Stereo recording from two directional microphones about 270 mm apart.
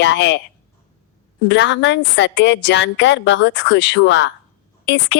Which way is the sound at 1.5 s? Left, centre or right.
Left.